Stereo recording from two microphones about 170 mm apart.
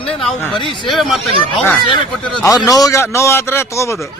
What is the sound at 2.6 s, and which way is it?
A man's voice, 20° left (ahead or behind).